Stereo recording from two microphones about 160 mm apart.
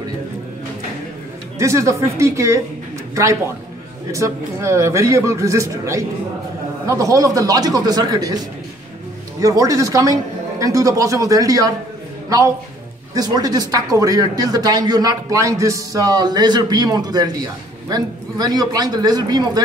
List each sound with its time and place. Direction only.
1.6 s a woman's voice: 20° right (ahead or behind)
4.1 s speech: 20° right (ahead or behind)
13.1 s speech: 25° right (ahead or behind)